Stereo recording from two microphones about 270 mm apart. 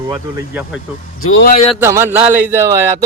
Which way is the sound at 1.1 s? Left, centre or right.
Left.